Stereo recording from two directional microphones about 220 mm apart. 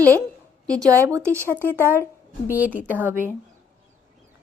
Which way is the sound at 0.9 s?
15° right (ahead or behind).